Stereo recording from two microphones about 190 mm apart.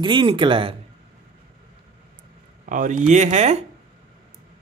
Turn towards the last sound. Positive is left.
turn(degrees=-35)  # may be behind; listen again after turning